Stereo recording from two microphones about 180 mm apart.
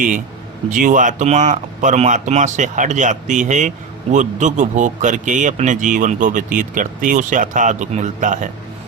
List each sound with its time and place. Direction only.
0.7 s speech: 45° right (ahead or behind)